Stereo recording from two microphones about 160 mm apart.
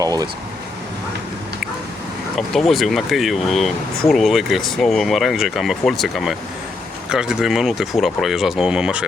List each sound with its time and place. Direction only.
0.0 s speech: 25° right (ahead or behind)
2.5 s speech: centre (ahead or behind)